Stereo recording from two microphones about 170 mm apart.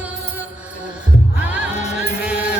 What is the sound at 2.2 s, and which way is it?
Music, 10° right (ahead or behind).